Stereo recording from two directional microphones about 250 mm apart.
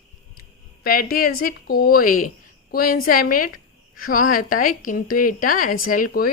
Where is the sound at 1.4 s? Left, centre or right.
Left.